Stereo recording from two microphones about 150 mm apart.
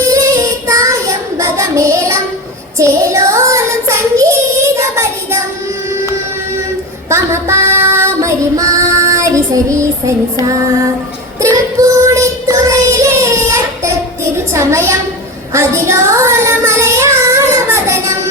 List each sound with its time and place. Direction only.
0.0 s child singing: 20° right (ahead or behind)
7.1 s child singing: 20° right (ahead or behind)
11.3 s child singing: 20° right (ahead or behind)
14.5 s a sound: 20° right (ahead or behind)
15.5 s child singing: 20° right (ahead or behind)